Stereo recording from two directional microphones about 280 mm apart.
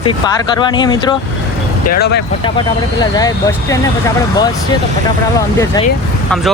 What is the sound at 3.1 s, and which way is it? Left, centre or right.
Speech, centre.